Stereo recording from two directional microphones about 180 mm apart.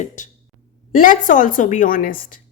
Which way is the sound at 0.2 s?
45° left (ahead or behind).